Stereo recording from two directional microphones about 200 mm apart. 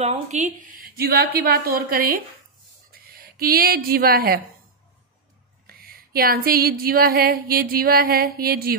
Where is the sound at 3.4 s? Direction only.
50° right (ahead or behind).